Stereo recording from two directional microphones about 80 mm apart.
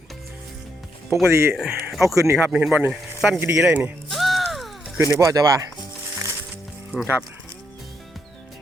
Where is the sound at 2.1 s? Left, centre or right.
Right.